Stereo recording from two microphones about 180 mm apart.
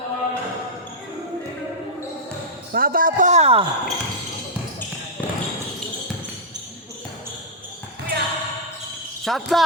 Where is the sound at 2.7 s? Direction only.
50° right (ahead or behind); by 3.6 s 35° right (ahead or behind).